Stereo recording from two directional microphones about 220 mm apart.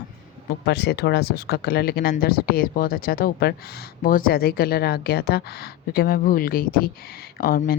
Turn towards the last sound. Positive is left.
turn(degrees=40)  # may be behind; listen again after turning